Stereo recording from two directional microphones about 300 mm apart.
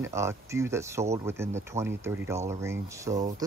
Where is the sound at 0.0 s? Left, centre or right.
Centre.